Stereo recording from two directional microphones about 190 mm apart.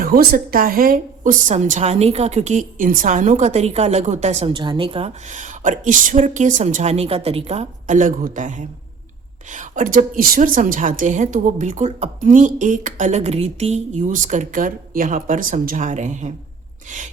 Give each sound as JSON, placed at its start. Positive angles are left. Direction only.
{"t": 0.0, "sound": "a woman's voice", "side_deg": -50}